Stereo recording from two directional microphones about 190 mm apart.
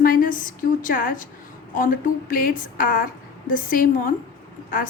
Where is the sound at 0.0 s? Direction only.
50° left (ahead or behind).